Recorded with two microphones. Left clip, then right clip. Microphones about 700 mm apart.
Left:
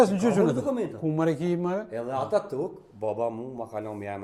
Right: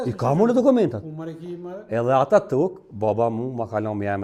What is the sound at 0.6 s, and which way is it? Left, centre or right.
Speech, right.